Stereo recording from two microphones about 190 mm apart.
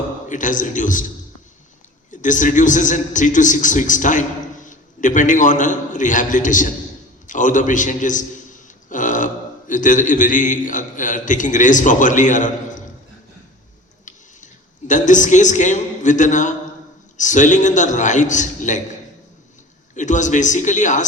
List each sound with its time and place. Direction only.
0.3 s a man's voice: 45° left (ahead or behind)
2.0 s a man's voice: 40° left (ahead or behind)
14.0 s a sound: 40° left (ahead or behind)
17.2 s a man's voice: 40° left (ahead or behind)
20.0 s a man's voice: 40° left (ahead or behind)